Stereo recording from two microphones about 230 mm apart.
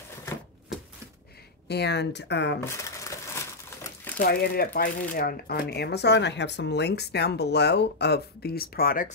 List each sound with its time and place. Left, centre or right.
1.7 s speech: left
2.6 s crumpling: centre
4.2 s speech: left